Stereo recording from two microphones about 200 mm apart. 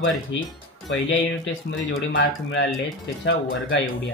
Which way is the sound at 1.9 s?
60° left (ahead or behind).